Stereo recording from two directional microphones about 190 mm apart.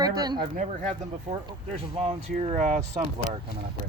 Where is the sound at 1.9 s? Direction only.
30° right (ahead or behind).